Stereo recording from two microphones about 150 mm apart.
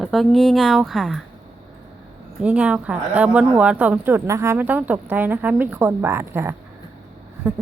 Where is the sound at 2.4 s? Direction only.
10° right (ahead or behind).